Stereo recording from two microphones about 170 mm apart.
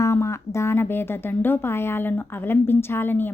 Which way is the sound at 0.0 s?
15° left (ahead or behind).